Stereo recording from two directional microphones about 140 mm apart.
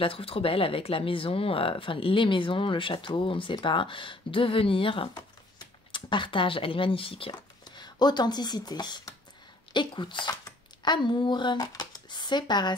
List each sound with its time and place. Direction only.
0.0 s speech: 40° left (ahead or behind)